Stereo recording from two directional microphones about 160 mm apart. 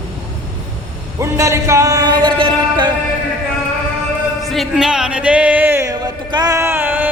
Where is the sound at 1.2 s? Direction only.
20° right (ahead or behind).